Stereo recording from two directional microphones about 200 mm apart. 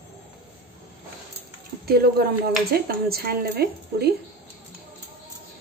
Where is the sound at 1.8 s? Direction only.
50° right (ahead or behind).